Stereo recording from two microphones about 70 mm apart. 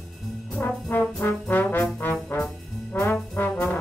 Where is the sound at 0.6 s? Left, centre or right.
Left.